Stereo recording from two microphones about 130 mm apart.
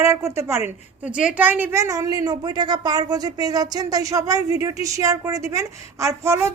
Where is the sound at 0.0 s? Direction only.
20° right (ahead or behind).